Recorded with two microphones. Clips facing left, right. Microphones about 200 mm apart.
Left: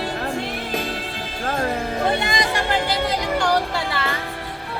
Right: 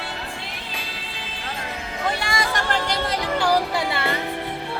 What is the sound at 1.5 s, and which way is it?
Music, 50° left (ahead or behind).